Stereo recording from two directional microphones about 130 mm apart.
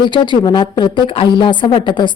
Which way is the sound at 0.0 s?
35° left (ahead or behind).